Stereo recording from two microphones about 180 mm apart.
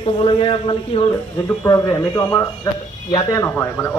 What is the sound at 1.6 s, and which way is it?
Speech, 20° left (ahead or behind).